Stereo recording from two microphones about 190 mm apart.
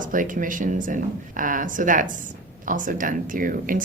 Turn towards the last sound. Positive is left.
turn(degrees=-45)  # may be behind; listen again after turning